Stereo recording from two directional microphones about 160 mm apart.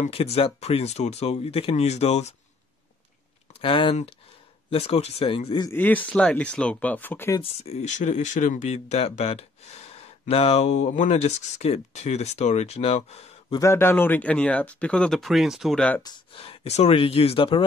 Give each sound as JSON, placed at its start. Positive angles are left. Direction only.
{"t": 0.0, "sound": "speech", "side_deg": 40}
{"t": 3.6, "sound": "speech", "side_deg": 35}
{"t": 5.7, "sound": "speech", "side_deg": 10}
{"t": 7.4, "sound": "speech", "side_deg": 40}
{"t": 13.6, "sound": "speech", "side_deg": 15}
{"t": 16.0, "sound": "speech", "side_deg": 30}